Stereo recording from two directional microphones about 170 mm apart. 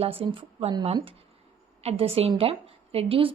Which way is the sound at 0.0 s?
35° right (ahead or behind).